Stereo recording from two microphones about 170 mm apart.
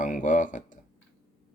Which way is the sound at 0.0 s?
50° left (ahead or behind).